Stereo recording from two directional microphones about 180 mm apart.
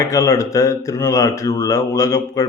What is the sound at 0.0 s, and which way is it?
Speech, 20° left (ahead or behind).